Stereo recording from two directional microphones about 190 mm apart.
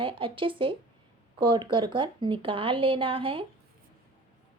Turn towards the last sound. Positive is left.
turn(degrees=-30)  # may be behind; listen again after turning